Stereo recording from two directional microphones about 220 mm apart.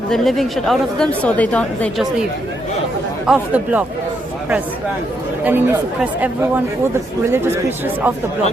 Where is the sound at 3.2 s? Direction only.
5° right (ahead or behind).